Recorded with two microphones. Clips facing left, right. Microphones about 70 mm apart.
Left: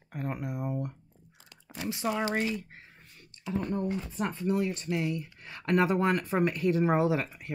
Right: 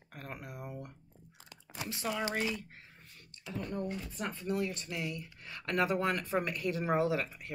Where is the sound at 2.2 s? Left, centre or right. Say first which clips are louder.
Left 4 dB; left.